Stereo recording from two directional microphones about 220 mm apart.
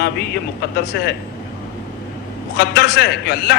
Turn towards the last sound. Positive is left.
turn(degrees=45)  # may be behind; listen again after turning